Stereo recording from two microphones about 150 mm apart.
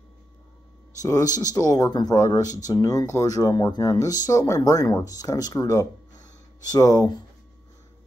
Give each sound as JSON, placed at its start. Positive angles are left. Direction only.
{"t": 1.0, "sound": "speech", "side_deg": 25}